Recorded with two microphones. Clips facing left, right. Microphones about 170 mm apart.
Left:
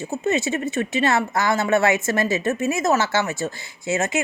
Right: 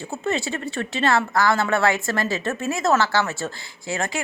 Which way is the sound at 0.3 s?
20° left (ahead or behind).